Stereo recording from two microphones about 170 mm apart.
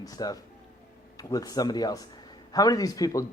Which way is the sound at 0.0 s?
20° left (ahead or behind).